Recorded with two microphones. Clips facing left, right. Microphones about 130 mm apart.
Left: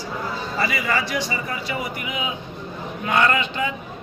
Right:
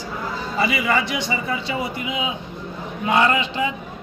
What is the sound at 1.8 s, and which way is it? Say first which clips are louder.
A man's voice: right 3 dB; 25° right (ahead or behind).